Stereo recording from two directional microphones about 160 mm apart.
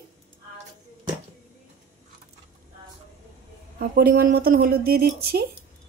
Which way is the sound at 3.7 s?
65° right (ahead or behind).